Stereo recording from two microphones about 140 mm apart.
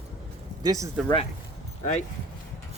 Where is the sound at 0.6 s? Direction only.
25° right (ahead or behind).